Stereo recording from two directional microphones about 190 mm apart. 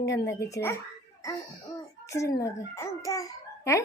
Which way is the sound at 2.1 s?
15° left (ahead or behind).